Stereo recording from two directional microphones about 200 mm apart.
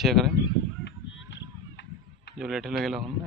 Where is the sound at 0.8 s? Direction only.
60° left (ahead or behind).